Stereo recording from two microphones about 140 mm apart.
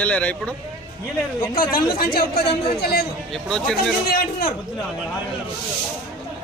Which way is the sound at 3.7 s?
90° left.